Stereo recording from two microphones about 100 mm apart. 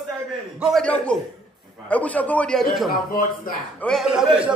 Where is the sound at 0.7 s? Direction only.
10° left (ahead or behind).